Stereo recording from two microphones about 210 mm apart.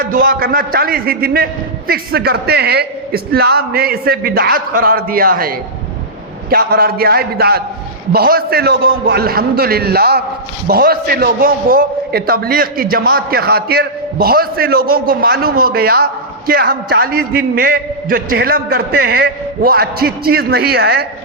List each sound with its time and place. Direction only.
0.0 s a man's voice: 45° right (ahead or behind)